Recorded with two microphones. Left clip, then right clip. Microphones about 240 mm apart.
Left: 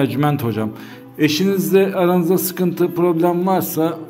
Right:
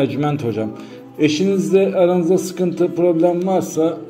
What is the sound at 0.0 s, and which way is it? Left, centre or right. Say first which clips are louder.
A man's voice: even; left.